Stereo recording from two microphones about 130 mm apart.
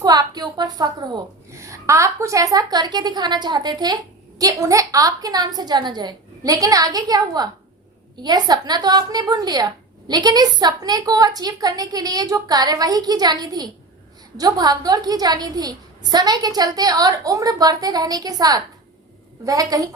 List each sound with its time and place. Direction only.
0.0 s a woman's voice: 30° right (ahead or behind)